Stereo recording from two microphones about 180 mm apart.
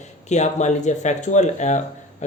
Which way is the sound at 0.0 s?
40° left (ahead or behind).